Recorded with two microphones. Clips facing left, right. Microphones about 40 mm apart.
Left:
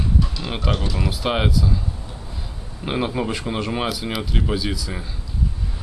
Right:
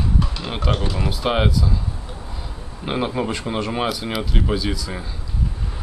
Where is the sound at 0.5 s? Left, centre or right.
Centre.